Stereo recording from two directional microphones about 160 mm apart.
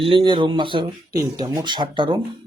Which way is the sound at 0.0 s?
35° right (ahead or behind).